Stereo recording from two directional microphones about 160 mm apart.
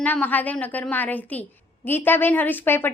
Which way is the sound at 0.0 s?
10° left (ahead or behind).